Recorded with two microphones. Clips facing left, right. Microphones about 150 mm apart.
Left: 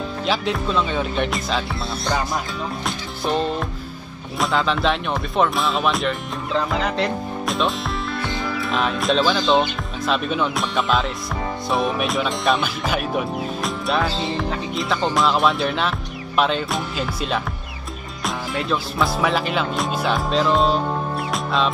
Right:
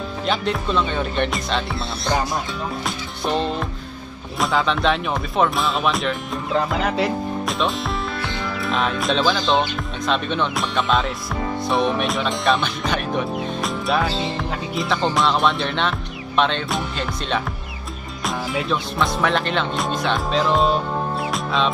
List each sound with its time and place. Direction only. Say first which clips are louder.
0.3 s speech: even; centre (ahead or behind)
2.8 s music: even; centre (ahead or behind)
4.4 s speech: even; centre (ahead or behind)
7.0 s music: right 2 dB; centre (ahead or behind)
8.5 s speech: right 1 dB; centre (ahead or behind)
21.3 s music: left 2 dB; centre (ahead or behind)